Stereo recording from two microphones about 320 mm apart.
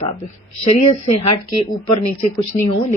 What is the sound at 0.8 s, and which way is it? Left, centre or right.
Speech, left.